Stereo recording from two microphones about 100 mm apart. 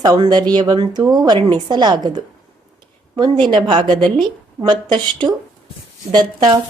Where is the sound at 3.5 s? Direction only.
50° right (ahead or behind).